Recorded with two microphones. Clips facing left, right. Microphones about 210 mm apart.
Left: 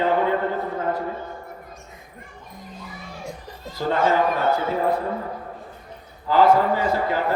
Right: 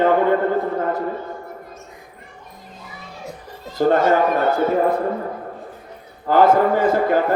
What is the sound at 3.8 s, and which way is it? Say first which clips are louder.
Speech: right 5 dB; 50° right (ahead or behind).